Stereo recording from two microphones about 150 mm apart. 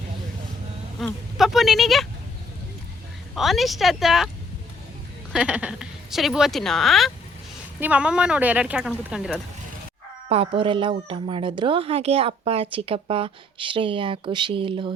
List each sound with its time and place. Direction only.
0.9 s a woman's voice: centre (ahead or behind)
3.3 s a woman's voice: centre (ahead or behind)
5.3 s a woman's voice: 5° right (ahead or behind)
7.8 s speech: 10° right (ahead or behind)
10.2 s speech: 40° right (ahead or behind)